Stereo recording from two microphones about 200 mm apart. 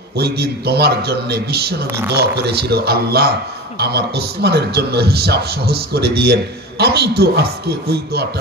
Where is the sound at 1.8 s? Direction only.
10° right (ahead or behind).